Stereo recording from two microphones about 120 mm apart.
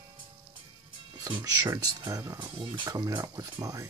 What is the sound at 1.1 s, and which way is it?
Speech, 30° right (ahead or behind).